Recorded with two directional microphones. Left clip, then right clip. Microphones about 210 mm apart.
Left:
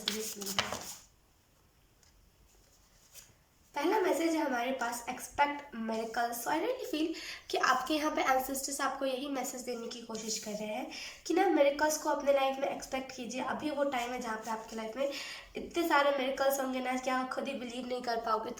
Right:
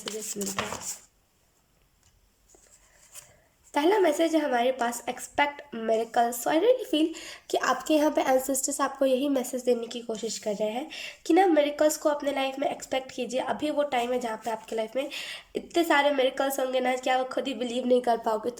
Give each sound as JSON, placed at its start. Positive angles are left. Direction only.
{"t": 3.8, "sound": "a woman's voice", "side_deg": -45}